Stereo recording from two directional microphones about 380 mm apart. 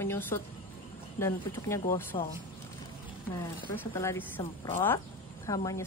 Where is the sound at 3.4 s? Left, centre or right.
Centre.